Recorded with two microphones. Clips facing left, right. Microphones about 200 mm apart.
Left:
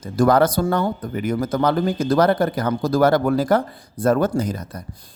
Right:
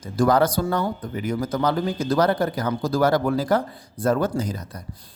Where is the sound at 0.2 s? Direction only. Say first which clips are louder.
Left 3 dB; 55° left (ahead or behind).